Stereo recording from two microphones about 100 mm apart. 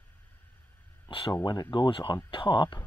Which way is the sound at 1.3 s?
40° left (ahead or behind).